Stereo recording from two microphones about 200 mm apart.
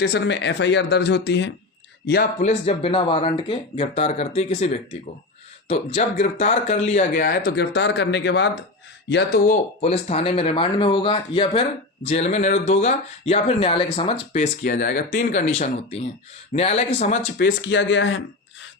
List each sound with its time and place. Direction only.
0.0 s speech: 55° left (ahead or behind)
2.4 s speech: 35° left (ahead or behind); by 9.6 s 50° left (ahead or behind)
10.1 s speech: 30° left (ahead or behind)
14.7 s speech: 50° left (ahead or behind); by 17.2 s 35° left (ahead or behind)
17.3 s speech: 55° left (ahead or behind)